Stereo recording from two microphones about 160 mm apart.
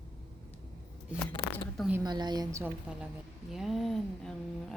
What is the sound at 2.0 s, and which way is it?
Speech, 25° right (ahead or behind).